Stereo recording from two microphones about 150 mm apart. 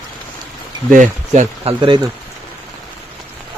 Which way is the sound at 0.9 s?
55° right (ahead or behind).